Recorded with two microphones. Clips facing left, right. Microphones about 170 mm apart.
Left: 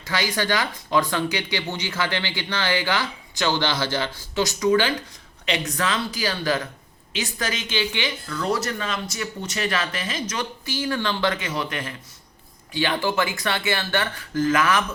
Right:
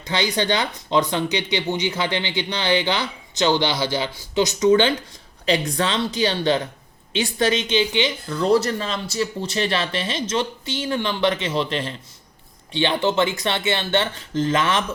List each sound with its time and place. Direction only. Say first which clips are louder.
0.0 s speech: right 3 dB; 20° right (ahead or behind)